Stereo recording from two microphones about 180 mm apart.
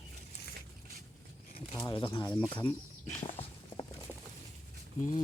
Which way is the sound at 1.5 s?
30° left (ahead or behind).